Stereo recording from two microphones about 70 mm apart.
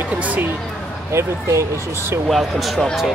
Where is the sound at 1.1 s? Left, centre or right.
Right.